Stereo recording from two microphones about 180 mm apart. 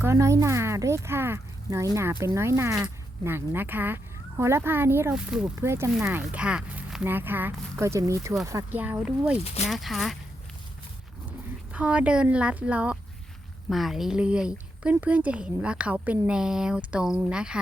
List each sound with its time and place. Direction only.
0.0 s speech: 15° right (ahead or behind); by 10.2 s centre (ahead or behind)
11.3 s speech: 5° right (ahead or behind)